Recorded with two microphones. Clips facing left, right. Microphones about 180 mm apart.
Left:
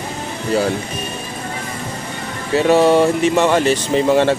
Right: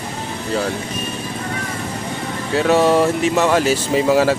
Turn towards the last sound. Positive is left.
turn(degrees=-5)  # may be behind; listen again after turning